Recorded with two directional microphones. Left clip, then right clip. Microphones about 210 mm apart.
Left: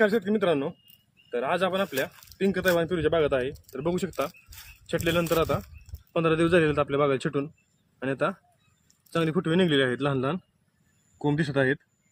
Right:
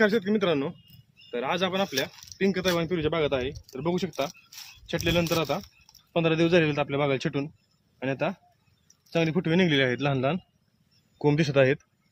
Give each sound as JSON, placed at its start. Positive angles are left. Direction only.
{"t": 0.0, "sound": "a man's voice", "side_deg": 5}
{"t": 11.2, "sound": "speech", "side_deg": -35}